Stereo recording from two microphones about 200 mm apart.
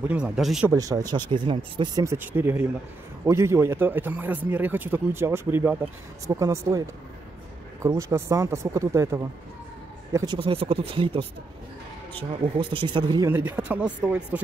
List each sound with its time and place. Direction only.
0.1 s speech: 5° right (ahead or behind)
0.7 s speech: 15° right (ahead or behind)
7.8 s speech: 15° right (ahead or behind)
12.5 s speech: 25° right (ahead or behind)
13.3 s speech: 10° right (ahead or behind)